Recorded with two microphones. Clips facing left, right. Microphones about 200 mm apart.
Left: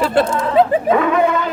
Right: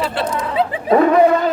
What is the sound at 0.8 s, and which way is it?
Speech, 35° right (ahead or behind).